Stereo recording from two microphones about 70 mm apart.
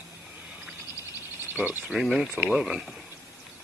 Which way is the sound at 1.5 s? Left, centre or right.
Right.